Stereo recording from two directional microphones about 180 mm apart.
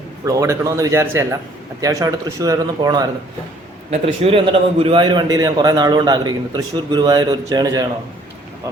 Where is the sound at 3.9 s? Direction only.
30° right (ahead or behind).